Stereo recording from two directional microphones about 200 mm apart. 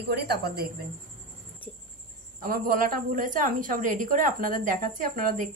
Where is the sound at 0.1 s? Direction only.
55° right (ahead or behind).